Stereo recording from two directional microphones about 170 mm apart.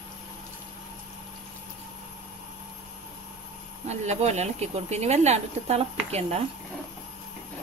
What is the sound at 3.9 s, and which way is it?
Speech, 40° right (ahead or behind).